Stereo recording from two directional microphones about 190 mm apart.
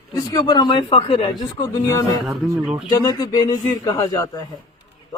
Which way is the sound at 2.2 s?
5° right (ahead or behind).